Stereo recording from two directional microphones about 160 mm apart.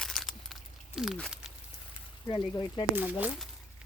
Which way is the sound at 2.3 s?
25° left (ahead or behind).